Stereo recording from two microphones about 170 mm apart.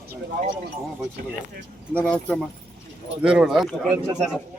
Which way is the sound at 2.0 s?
5° left (ahead or behind).